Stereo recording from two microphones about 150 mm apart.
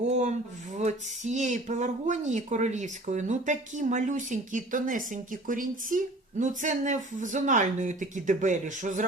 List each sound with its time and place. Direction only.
0.1 s speech: 50° right (ahead or behind)